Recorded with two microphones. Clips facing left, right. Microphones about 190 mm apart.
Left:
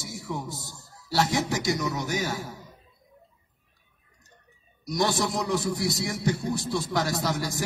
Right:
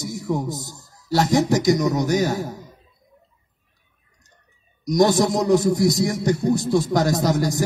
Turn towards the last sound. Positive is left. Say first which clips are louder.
# right 8 dB
turn(degrees=-45)  # may be behind; listen again after turning